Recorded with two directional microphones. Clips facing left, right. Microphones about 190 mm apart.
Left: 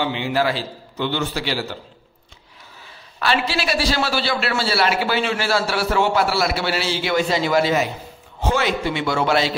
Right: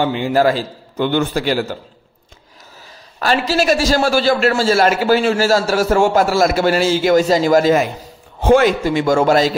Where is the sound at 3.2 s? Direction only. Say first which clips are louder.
Right 5 dB; 45° right (ahead or behind).